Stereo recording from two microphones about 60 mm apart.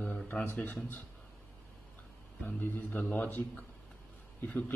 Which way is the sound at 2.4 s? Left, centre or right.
Left.